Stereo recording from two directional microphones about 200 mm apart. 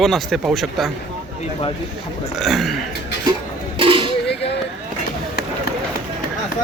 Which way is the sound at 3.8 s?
25° right (ahead or behind).